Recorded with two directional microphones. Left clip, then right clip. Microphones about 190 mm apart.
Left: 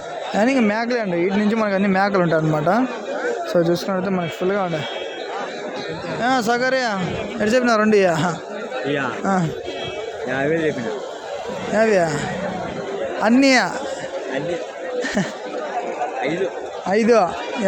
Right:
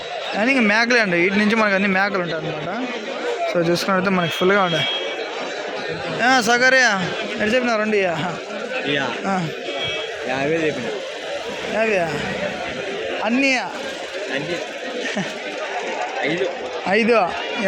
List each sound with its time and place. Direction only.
0.3 s a man's voice: 15° left (ahead or behind); by 2.8 s 30° left (ahead or behind)
3.5 s speech: 15° left (ahead or behind)
3.8 s speech: centre (ahead or behind)
6.1 s a man's voice: 15° left (ahead or behind)
7.4 s a man's voice: 35° left (ahead or behind)
8.9 s a man's voice: 25° left (ahead or behind)
13.2 s a man's voice: 35° left (ahead or behind)
16.9 s speech: 20° left (ahead or behind)